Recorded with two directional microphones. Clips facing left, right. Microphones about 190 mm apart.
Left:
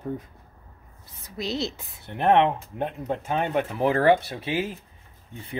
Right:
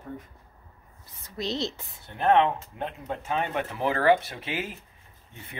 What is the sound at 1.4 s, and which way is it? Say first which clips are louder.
Speech: left 1 dB; 5° left (ahead or behind).